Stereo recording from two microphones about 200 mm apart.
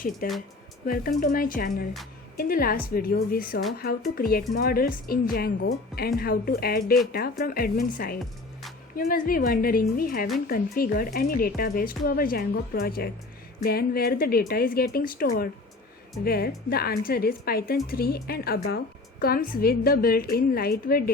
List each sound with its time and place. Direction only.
0.2 s speech: 45° left (ahead or behind)